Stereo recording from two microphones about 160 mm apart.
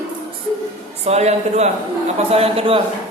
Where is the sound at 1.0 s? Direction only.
40° right (ahead or behind).